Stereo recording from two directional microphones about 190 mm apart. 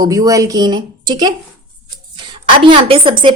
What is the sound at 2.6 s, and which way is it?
Speech, 25° right (ahead or behind).